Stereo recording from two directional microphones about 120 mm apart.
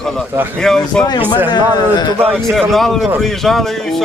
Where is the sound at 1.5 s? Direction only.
35° left (ahead or behind).